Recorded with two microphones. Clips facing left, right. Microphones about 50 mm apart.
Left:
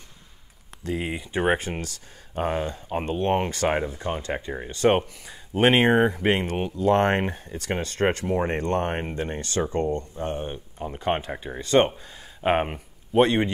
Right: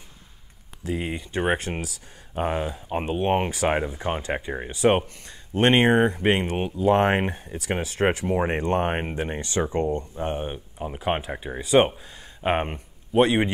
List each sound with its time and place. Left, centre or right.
0.8 s speech: centre
4.0 s speech: centre
4.8 s speech: centre